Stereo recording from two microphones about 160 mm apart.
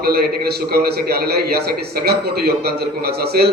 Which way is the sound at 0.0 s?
75° right (ahead or behind).